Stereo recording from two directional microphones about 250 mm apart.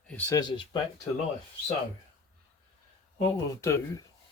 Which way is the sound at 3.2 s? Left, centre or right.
Centre.